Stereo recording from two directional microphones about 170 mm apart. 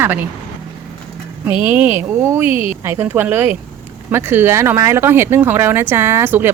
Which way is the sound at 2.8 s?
15° right (ahead or behind).